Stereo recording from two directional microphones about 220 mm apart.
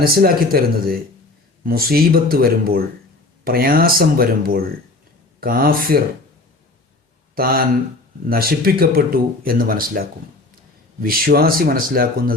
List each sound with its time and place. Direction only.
0.0 s speech: 45° right (ahead or behind)
7.3 s speech: 40° right (ahead or behind)